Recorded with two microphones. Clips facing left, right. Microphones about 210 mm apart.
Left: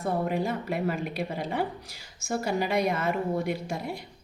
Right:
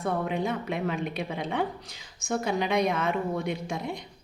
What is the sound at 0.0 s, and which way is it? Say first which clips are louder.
A woman's voice: left 1 dB; 5° left (ahead or behind).